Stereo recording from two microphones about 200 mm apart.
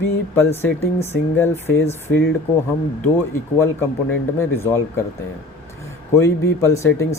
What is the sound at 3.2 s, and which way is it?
Speech, 10° left (ahead or behind).